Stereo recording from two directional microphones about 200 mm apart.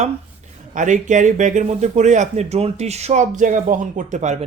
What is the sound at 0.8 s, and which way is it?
Speech, 40° right (ahead or behind).